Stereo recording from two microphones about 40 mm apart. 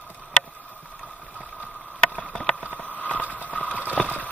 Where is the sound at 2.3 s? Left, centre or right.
Left.